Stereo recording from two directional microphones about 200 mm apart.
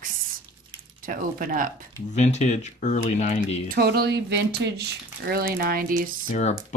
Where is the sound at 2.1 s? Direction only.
35° left (ahead or behind).